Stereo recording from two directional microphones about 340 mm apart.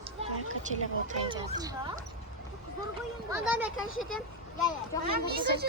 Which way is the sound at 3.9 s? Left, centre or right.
Left.